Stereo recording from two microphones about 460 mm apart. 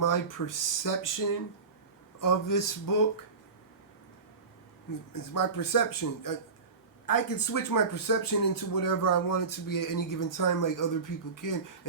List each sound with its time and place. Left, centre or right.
0.0 s speech: left
5.1 s speech: left